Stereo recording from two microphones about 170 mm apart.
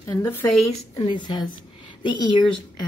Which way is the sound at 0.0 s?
15° left (ahead or behind).